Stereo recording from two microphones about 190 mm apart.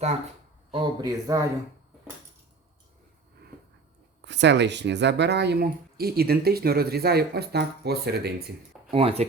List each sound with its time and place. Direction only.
0.7 s speech: 25° right (ahead or behind)
4.2 s speech: 65° right (ahead or behind)
8.9 s speech: 30° right (ahead or behind)